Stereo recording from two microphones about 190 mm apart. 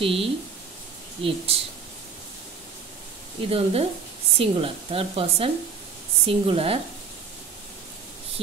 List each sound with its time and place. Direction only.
0.0 s speech: 30° right (ahead or behind)
3.4 s speech: 30° right (ahead or behind)